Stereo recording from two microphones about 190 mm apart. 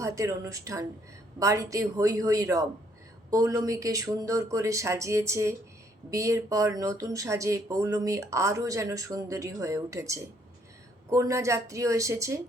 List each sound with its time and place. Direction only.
0.0 s speech: 15° right (ahead or behind)